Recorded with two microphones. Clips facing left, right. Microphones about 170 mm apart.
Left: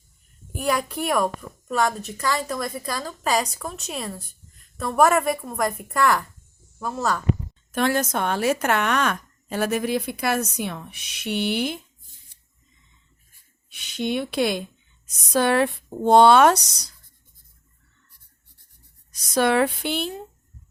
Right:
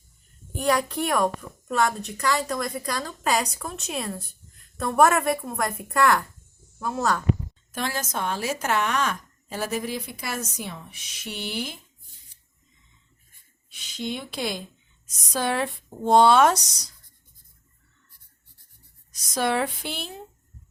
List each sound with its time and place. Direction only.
0.5 s speech: 5° left (ahead or behind)
7.7 s speech: 60° left (ahead or behind)
13.7 s speech: 65° left (ahead or behind)
19.1 s speech: 65° left (ahead or behind)